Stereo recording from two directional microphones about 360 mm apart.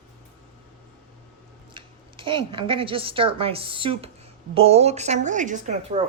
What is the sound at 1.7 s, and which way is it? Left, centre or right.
A woman's voice, centre.